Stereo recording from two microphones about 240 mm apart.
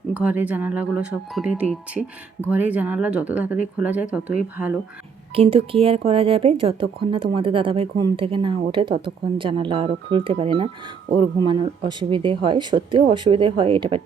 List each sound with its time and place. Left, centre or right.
0.1 s speech: centre
5.3 s speech: right